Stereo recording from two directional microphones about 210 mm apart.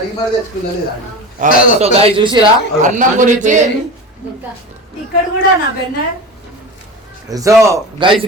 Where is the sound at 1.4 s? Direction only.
35° right (ahead or behind).